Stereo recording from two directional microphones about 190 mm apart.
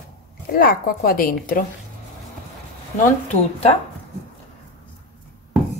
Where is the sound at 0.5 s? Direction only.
50° left (ahead or behind).